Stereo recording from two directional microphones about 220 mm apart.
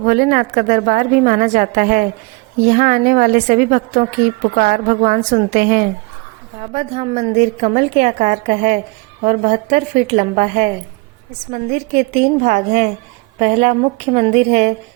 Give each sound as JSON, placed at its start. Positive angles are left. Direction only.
{"t": 0.0, "sound": "a woman's voice", "side_deg": -35}
{"t": 6.6, "sound": "a woman's voice", "side_deg": -25}